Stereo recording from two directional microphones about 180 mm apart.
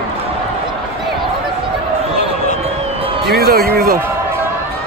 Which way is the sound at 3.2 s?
60° right (ahead or behind).